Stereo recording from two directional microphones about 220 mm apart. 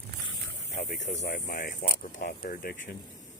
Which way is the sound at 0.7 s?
35° left (ahead or behind).